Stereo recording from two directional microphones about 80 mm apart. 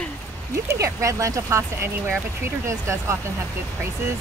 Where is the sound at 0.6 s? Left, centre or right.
Right.